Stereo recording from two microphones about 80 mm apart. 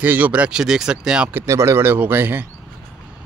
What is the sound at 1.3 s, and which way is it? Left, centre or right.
A man's voice, right.